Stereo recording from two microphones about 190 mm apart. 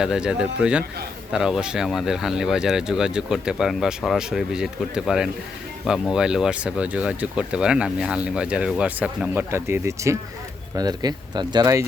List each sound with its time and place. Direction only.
0.0 s speech: 5° right (ahead or behind)